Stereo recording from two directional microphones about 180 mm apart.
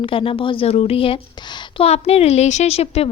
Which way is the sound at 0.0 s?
30° left (ahead or behind).